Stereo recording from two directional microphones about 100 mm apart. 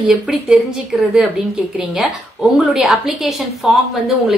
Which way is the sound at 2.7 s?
5° right (ahead or behind).